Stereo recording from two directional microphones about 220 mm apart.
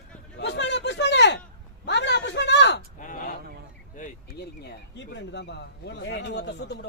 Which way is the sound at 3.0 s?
35° left (ahead or behind).